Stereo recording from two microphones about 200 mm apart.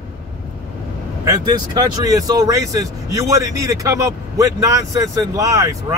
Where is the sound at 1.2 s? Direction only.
20° right (ahead or behind).